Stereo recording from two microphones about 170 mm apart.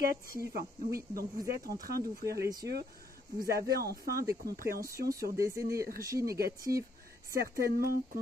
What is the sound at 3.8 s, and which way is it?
Speech, 60° right (ahead or behind).